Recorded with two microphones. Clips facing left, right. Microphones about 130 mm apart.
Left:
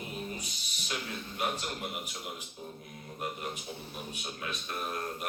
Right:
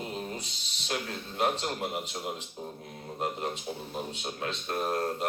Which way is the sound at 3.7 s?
45° right (ahead or behind).